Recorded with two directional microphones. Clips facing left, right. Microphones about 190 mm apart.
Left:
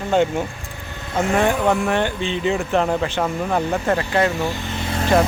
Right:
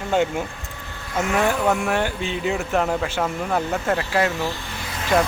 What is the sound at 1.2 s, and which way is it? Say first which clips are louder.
Speech: left 3 dB; 25° left (ahead or behind).